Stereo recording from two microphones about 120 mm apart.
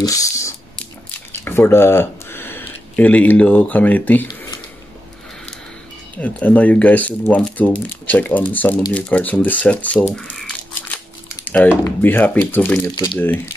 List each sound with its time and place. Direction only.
0.0 s speech: 30° left (ahead or behind)
6.1 s speech: 15° left (ahead or behind)
11.4 s a sound: 15° left (ahead or behind)
11.8 s speech: 15° left (ahead or behind)